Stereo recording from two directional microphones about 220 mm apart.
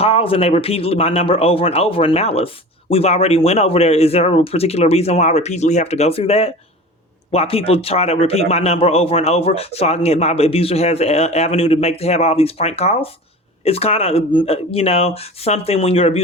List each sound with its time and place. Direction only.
0.0 s a man's voice: 25° left (ahead or behind)